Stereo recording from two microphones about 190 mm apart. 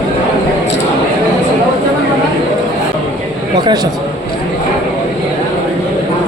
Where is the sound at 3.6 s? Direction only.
20° right (ahead or behind).